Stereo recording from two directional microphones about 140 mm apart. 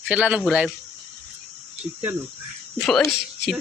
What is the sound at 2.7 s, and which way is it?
Speech, 5° left (ahead or behind).